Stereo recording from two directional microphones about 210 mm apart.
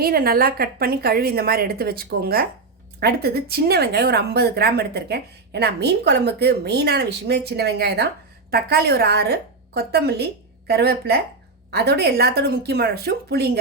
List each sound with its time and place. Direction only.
0.0 s speech: 45° right (ahead or behind)